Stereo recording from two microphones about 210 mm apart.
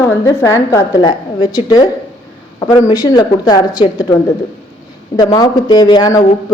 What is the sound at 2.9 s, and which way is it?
Speech, 20° left (ahead or behind).